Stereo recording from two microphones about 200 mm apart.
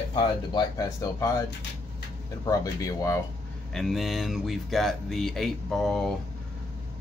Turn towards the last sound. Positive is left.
turn(degrees=0)  # may be behind; listen again after turning